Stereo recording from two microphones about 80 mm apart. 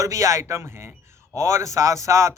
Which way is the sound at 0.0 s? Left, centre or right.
Right.